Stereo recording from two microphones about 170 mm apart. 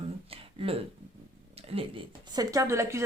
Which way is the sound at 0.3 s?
35° right (ahead or behind).